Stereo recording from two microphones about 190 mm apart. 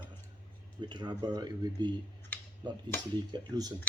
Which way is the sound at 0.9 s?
25° right (ahead or behind).